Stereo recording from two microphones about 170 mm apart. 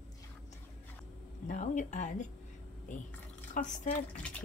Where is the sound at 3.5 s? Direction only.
45° left (ahead or behind).